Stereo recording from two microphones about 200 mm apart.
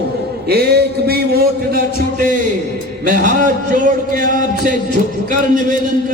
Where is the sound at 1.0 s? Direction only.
50° right (ahead or behind).